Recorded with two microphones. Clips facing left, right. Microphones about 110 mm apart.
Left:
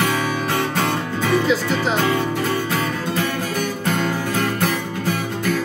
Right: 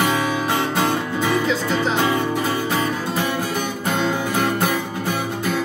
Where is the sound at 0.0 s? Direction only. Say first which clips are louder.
Right 1 dB; 15° right (ahead or behind).